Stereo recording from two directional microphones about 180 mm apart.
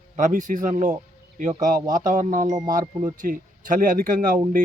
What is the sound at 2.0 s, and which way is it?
Speech, 45° right (ahead or behind).